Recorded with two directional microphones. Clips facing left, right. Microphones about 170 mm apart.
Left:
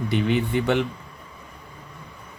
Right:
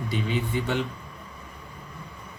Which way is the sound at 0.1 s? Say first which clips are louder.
Left 6 dB; 65° left (ahead or behind).